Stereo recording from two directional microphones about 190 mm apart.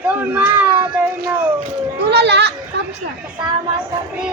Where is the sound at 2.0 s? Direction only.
65° right (ahead or behind).